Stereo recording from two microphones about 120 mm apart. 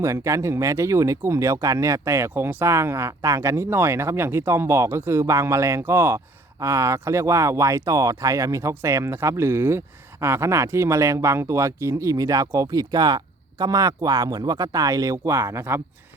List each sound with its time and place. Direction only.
0.0 s speech: 25° right (ahead or behind)